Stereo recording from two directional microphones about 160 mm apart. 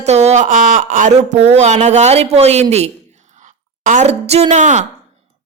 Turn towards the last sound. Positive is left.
turn(degrees=-50)  # may be behind; listen again after turning